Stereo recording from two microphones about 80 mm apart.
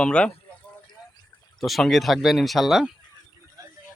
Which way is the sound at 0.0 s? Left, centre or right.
Centre.